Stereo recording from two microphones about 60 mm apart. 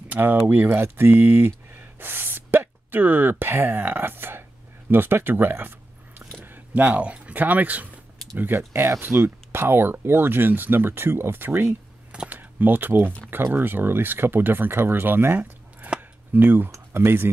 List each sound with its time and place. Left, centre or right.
0.1 s speech: right